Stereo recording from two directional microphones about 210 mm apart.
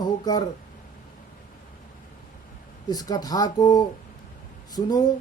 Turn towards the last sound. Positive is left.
turn(degrees=20)  # may be behind; listen again after turning